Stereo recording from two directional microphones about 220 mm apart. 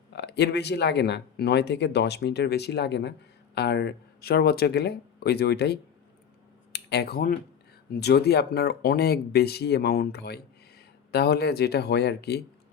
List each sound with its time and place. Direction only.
0.1 s speech: 50° left (ahead or behind)